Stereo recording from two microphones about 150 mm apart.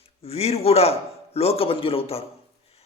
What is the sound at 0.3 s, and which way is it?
A man's voice, 45° left (ahead or behind).